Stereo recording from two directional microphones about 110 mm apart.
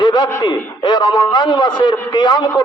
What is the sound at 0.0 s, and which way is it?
A man's voice, 40° left (ahead or behind).